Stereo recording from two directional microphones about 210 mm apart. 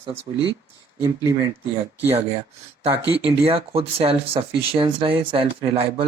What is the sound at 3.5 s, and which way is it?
Speech, 25° right (ahead or behind).